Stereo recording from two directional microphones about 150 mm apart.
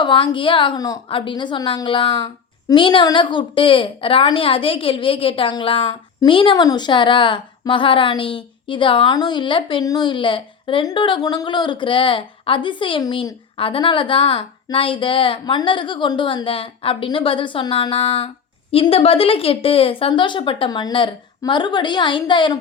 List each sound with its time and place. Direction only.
0.0 s a woman's voice: 35° left (ahead or behind)